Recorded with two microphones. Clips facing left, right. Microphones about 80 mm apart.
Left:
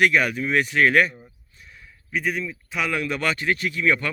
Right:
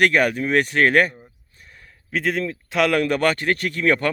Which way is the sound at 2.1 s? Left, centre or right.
Right.